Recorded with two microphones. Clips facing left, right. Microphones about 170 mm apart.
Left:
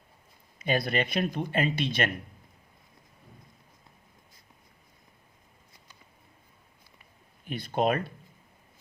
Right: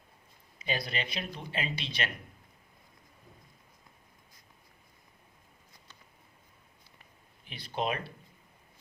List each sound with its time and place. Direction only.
0.6 s speech: 55° left (ahead or behind)
7.4 s speech: 50° left (ahead or behind)